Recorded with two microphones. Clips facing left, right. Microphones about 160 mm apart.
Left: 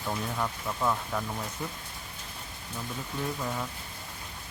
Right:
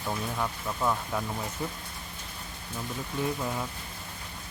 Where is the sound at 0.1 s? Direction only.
Centre (ahead or behind).